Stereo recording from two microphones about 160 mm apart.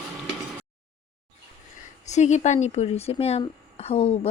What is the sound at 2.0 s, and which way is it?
Speech, 45° left (ahead or behind).